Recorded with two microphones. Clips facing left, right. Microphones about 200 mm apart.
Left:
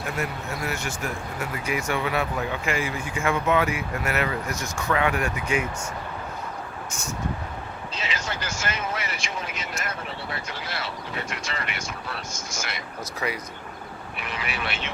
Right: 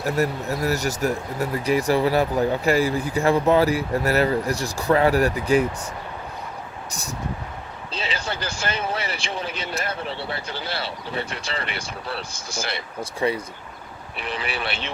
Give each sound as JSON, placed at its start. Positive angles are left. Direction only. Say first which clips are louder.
{"t": 0.0, "sound": "speech", "louder": "right 7 dB", "side_deg": -35}
{"t": 7.9, "sound": "speech", "louder": "right 4 dB", "side_deg": -30}